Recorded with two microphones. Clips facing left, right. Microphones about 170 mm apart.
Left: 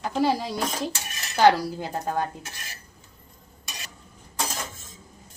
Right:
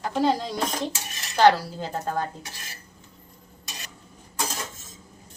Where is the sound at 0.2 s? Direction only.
5° left (ahead or behind).